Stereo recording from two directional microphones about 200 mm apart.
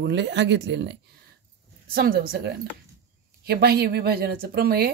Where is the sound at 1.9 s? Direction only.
50° right (ahead or behind).